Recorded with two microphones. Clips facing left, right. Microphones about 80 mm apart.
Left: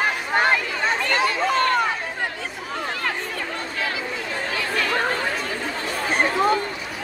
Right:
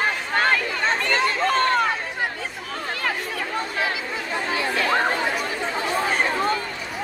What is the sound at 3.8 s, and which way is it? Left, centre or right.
Chatter, right.